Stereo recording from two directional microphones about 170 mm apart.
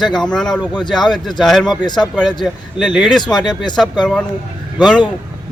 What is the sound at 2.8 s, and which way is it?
Speech, 5° right (ahead or behind).